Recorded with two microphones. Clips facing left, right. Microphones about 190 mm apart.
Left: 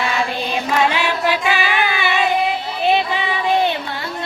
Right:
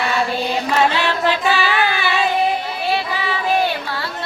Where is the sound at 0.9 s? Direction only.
15° left (ahead or behind).